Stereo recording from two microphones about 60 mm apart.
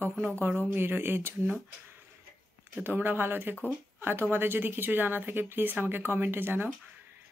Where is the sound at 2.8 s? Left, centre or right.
Right.